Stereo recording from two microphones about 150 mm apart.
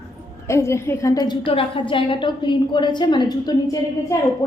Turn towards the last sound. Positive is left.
turn(degrees=25)  # may be behind; listen again after turning